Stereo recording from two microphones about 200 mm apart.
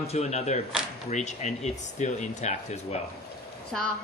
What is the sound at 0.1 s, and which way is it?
Speech, 35° left (ahead or behind).